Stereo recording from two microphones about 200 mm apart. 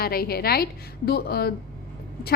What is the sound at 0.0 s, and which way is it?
A woman's voice, 50° left (ahead or behind).